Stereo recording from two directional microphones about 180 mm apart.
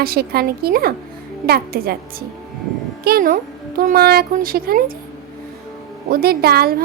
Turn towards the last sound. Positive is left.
turn(degrees=-60)  # may be behind; listen again after turning